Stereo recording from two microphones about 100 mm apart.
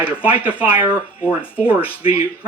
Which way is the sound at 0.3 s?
15° right (ahead or behind).